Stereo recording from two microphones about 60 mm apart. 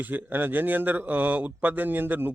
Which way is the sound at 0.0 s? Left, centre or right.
Right.